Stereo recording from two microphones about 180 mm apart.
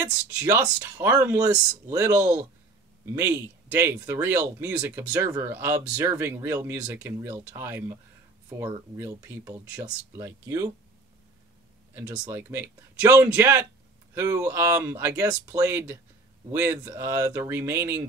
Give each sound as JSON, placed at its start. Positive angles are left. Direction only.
{"t": 0.4, "sound": "speech", "side_deg": -15}
{"t": 11.9, "sound": "speech", "side_deg": -10}